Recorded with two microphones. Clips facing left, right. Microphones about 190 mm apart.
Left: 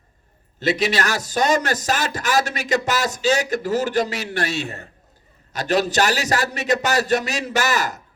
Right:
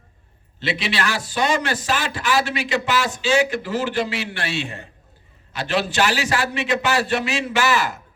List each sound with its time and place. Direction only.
0.6 s a man's voice: 45° left (ahead or behind)